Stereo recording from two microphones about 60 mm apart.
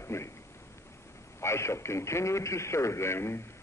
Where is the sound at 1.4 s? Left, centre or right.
Left.